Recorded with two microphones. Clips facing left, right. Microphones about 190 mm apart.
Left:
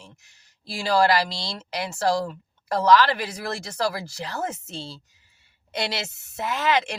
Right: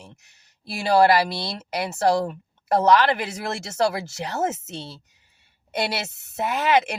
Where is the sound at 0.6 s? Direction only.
60° right (ahead or behind).